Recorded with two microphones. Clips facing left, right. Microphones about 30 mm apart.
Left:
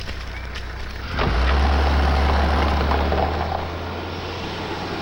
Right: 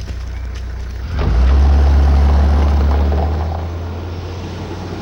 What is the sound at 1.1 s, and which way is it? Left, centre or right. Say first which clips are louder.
Vehicle: even; left.